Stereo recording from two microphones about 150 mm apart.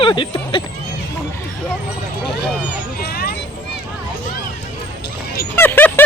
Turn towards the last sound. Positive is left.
turn(degrees=15)  # may be behind; listen again after turning